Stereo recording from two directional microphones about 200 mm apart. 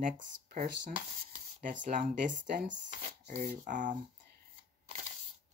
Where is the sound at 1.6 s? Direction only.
40° right (ahead or behind).